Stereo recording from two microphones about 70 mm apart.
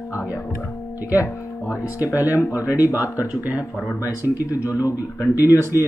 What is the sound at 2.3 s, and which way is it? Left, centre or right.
Speech, left.